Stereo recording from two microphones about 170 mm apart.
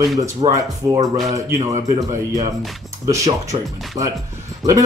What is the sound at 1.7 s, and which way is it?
Speech, 45° right (ahead or behind).